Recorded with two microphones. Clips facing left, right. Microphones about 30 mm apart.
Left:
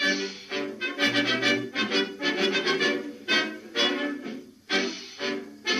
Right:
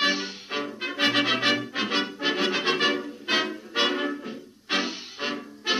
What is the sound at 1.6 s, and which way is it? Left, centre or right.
Music, right.